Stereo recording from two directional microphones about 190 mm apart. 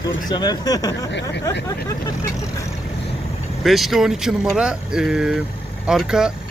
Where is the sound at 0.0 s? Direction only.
20° left (ahead or behind).